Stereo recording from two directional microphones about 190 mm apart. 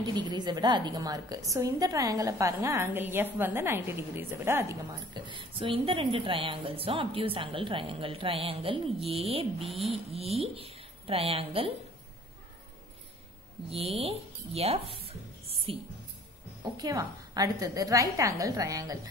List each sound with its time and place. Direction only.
0.0 s a woman's voice: 20° right (ahead or behind)
13.7 s a woman's voice: 30° right (ahead or behind)